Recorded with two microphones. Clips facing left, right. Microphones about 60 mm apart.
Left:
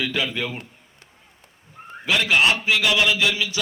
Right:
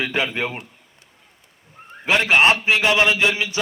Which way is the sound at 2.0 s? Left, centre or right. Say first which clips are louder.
Right 3 dB; right.